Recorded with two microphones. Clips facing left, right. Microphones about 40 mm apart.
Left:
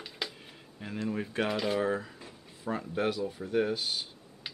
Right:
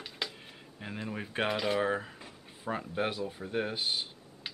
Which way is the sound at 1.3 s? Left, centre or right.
Right.